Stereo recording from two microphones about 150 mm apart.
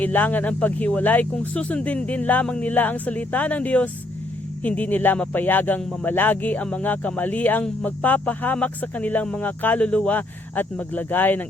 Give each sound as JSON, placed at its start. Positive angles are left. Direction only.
{"t": 0.0, "sound": "speech", "side_deg": 10}